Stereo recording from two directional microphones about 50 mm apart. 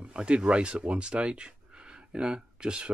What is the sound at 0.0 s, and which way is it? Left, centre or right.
Speech, right.